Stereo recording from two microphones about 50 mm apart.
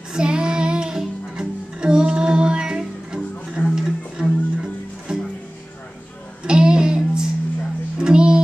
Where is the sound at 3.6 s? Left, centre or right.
Left.